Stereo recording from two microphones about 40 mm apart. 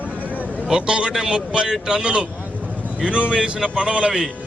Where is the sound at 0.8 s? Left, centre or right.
Right.